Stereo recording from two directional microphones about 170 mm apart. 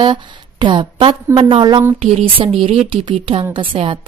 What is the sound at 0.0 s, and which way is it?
A woman's voice, 25° right (ahead or behind).